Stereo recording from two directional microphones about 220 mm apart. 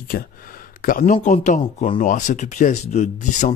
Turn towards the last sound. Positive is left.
turn(degrees=35)  # may be behind; listen again after turning